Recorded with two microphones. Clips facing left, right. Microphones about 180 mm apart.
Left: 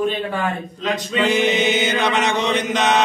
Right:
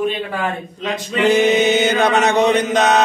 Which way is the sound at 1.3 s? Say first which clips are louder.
Right 6 dB; 45° right (ahead or behind).